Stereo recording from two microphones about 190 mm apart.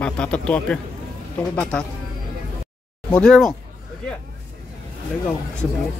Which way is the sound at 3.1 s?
5° left (ahead or behind).